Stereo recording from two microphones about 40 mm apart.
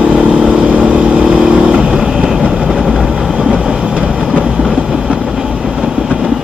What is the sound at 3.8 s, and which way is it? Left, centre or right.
Train, right.